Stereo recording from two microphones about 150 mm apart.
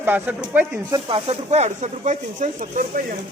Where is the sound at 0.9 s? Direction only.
35° right (ahead or behind); by 3.0 s 65° right (ahead or behind).